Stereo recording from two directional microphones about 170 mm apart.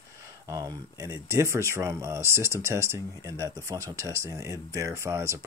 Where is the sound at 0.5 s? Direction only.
20° right (ahead or behind).